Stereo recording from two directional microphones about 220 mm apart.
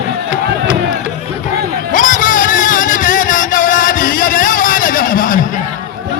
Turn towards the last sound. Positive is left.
turn(degrees=40)  # may be behind; listen again after turning